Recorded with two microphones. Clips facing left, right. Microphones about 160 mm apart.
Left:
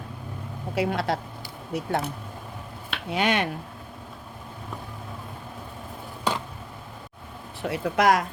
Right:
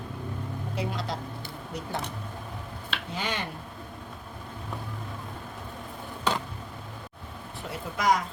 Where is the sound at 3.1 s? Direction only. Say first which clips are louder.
Left 10 dB; 70° left (ahead or behind).